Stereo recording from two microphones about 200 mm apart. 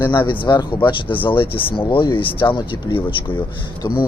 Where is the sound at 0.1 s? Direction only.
25° left (ahead or behind).